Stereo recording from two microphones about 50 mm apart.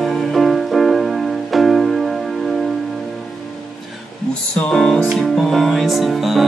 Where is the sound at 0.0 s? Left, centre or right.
Centre.